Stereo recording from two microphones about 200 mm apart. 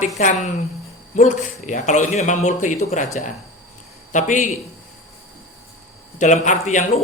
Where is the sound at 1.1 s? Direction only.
40° left (ahead or behind).